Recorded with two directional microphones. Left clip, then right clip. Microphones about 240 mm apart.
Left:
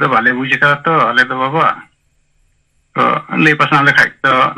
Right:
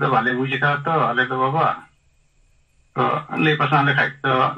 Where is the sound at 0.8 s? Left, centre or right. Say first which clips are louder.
Left 8 dB; left.